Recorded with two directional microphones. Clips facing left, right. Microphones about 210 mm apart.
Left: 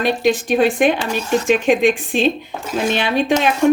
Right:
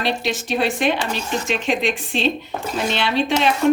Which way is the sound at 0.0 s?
50° left (ahead or behind).